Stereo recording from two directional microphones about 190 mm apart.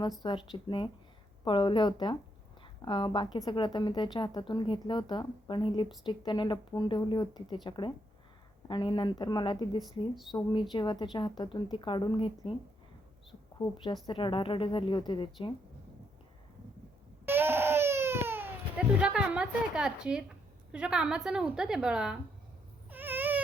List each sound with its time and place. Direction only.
0.2 s speech: 25° left (ahead or behind)
13.6 s speech: 25° left (ahead or behind)
17.2 s baby cry: 10° right (ahead or behind)
20.7 s a woman's voice: 5° right (ahead or behind)
22.9 s a sound: 10° right (ahead or behind)